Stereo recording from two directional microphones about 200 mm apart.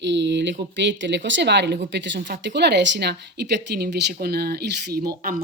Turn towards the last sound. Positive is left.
turn(degrees=-45)  # may be behind; listen again after turning